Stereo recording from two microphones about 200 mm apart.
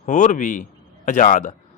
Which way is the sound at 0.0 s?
35° left (ahead or behind).